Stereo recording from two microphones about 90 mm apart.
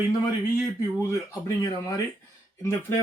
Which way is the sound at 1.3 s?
35° left (ahead or behind).